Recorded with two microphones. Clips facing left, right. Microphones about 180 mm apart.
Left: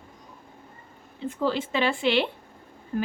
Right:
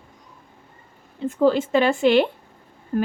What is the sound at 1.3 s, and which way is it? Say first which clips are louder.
A woman's voice: right 8 dB; 45° right (ahead or behind).